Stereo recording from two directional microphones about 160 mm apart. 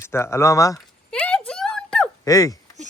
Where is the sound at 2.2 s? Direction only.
25° left (ahead or behind).